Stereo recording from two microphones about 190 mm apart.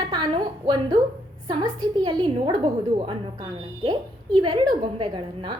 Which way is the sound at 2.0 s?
25° right (ahead or behind).